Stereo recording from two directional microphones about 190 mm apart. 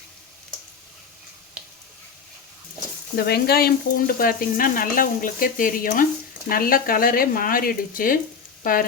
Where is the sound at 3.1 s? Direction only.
55° left (ahead or behind).